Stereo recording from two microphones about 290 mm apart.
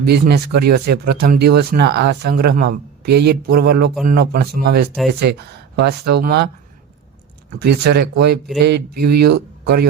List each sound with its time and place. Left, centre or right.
0.0 s speech: right
7.6 s speech: right